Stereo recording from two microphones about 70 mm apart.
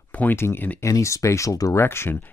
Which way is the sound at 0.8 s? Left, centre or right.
Left.